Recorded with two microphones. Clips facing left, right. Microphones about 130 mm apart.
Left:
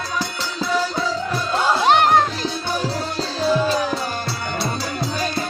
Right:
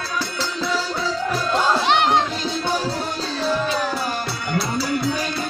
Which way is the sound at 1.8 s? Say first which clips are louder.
Left 7 dB; 45° left (ahead or behind).